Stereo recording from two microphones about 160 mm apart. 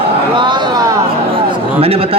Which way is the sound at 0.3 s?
30° right (ahead or behind).